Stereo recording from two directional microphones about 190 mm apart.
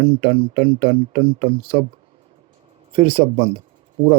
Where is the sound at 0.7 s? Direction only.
30° right (ahead or behind).